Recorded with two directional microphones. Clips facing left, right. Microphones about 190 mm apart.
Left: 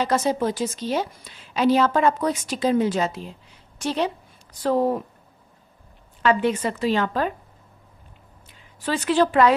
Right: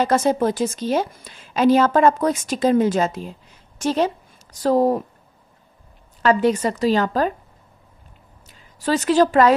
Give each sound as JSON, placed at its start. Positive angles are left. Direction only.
{"t": 0.0, "sound": "a woman's voice", "side_deg": -50}
{"t": 6.2, "sound": "a woman's voice", "side_deg": -40}
{"t": 8.5, "sound": "a woman's voice", "side_deg": -40}